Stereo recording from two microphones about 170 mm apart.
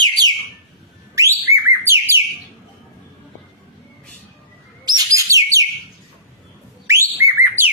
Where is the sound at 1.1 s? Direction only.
20° right (ahead or behind).